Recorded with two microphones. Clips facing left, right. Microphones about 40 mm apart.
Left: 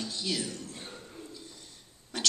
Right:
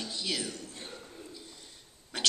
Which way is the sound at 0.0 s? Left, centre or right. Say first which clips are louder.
Left 1 dB; centre.